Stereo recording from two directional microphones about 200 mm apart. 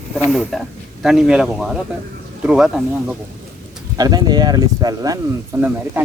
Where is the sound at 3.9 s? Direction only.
20° right (ahead or behind).